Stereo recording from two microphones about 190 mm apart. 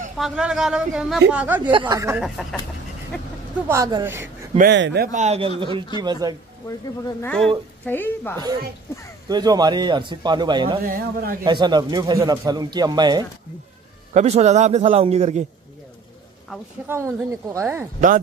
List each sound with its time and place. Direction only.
0.2 s speech: 5° right (ahead or behind)
1.6 s speech: 25° right (ahead or behind)
2.1 s speech: 5° right (ahead or behind)
3.6 s speech: 15° right (ahead or behind)
4.6 s speech: 65° right (ahead or behind)
5.1 s a man's voice: 35° right (ahead or behind)
7.2 s a woman's voice: 5° left (ahead or behind)
9.3 s speech: 20° right (ahead or behind)
10.9 s a man's voice: 50° right (ahead or behind)
11.4 s speech: 25° right (ahead or behind)
14.1 s a man's voice: 35° right (ahead or behind)
16.8 s speech: 15° right (ahead or behind)